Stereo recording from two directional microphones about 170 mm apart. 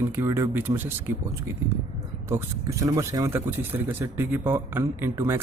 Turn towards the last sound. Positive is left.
turn(degrees=-15)  # may be behind; listen again after turning